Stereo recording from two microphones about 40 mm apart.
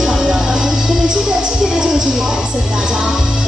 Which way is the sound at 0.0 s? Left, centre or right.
Centre.